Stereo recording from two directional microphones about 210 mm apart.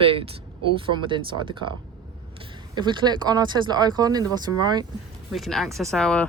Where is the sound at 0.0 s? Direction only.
25° right (ahead or behind).